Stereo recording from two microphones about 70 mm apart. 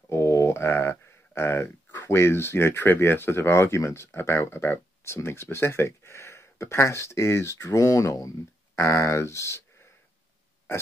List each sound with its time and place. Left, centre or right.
0.1 s speech: left